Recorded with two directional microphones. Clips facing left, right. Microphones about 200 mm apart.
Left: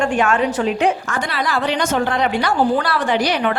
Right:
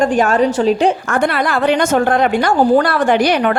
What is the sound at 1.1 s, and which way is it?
A woman's voice, 55° right (ahead or behind).